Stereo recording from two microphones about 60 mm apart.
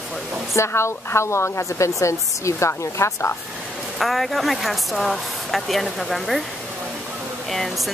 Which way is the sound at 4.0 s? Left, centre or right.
Centre.